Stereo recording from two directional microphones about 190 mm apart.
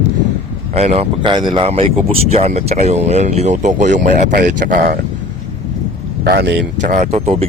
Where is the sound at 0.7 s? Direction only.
35° right (ahead or behind).